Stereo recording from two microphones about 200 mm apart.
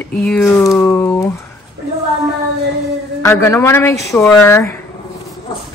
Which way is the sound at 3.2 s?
15° left (ahead or behind).